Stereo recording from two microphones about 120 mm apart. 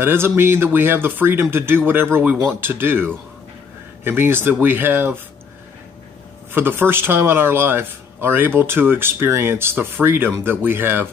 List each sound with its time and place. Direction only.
0.0 s speech: 20° right (ahead or behind)
6.5 s speech: 15° right (ahead or behind)